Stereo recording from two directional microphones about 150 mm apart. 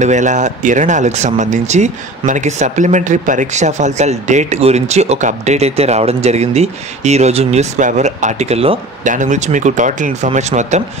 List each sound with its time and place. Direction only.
0.0 s speech: 55° right (ahead or behind)
9.1 s speech: 55° right (ahead or behind)